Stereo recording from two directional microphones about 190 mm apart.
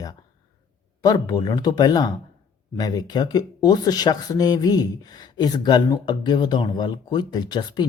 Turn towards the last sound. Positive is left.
turn(degrees=20)  # may be behind; listen again after turning